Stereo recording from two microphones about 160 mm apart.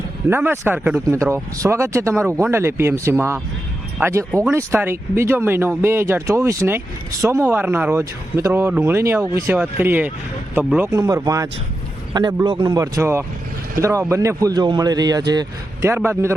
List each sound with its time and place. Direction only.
0.3 s speech: 15° right (ahead or behind)